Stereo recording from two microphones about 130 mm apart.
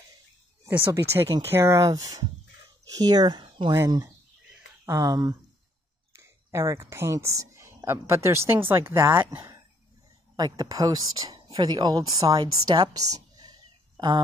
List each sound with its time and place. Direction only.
0.7 s speech: 15° right (ahead or behind); by 3.7 s 35° right (ahead or behind)
3.7 s speech: 20° right (ahead or behind)
10.3 s speech: 30° right (ahead or behind)
13.1 s a sound: 30° right (ahead or behind)